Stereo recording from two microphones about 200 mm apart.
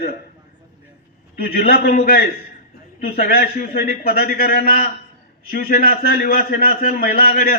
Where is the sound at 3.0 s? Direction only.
50° left (ahead or behind).